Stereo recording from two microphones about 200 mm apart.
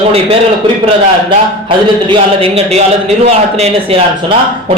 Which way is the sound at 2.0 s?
30° right (ahead or behind).